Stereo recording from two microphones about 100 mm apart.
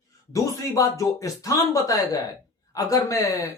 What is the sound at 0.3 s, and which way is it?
Speech, 35° left (ahead or behind).